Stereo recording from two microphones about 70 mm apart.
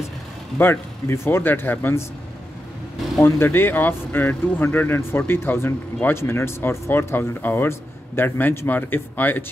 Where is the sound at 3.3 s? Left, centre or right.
Left.